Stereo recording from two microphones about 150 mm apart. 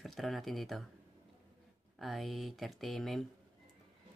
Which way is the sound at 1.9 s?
Centre (ahead or behind).